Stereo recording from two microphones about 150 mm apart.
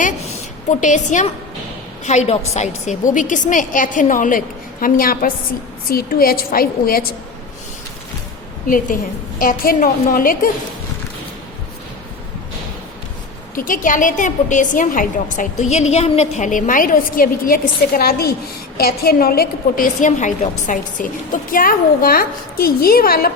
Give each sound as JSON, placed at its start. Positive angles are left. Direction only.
{"t": 0.7, "sound": "a woman's voice", "side_deg": 55}
{"t": 8.6, "sound": "a woman's voice", "side_deg": 65}
{"t": 13.6, "sound": "a woman's voice", "side_deg": 65}
{"t": 21.5, "sound": "a woman's voice", "side_deg": 70}